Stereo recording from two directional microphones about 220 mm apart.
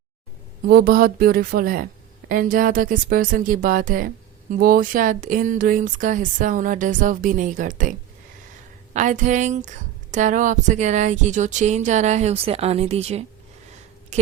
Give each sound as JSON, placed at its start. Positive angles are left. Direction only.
{"t": 0.7, "sound": "speech", "side_deg": -45}
{"t": 14.1, "sound": "chewing", "side_deg": -30}